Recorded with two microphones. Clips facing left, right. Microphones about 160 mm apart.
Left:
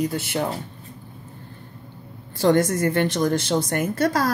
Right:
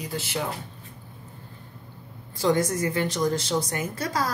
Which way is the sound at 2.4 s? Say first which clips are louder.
Left 5 dB; 60° left (ahead or behind).